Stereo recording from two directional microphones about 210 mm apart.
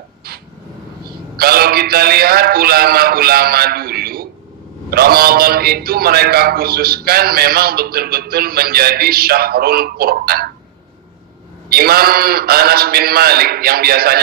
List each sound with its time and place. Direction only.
1.3 s a man's voice: 45° right (ahead or behind)
11.7 s a man's voice: 45° right (ahead or behind)